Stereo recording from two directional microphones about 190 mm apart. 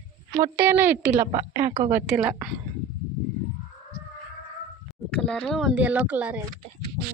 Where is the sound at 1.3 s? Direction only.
45° right (ahead or behind).